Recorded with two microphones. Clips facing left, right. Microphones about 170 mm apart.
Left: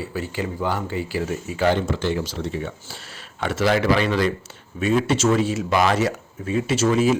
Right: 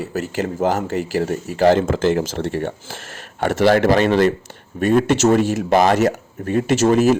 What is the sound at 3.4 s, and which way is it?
A man's voice, 50° right (ahead or behind).